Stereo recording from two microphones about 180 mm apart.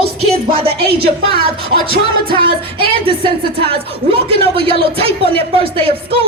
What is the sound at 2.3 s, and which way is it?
Speech, 30° right (ahead or behind).